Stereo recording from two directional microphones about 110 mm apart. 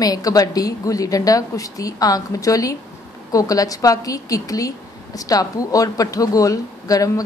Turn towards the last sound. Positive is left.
turn(degrees=30)  # may be behind; listen again after turning